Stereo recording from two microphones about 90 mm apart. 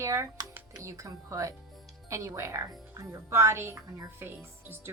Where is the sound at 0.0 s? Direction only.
35° right (ahead or behind).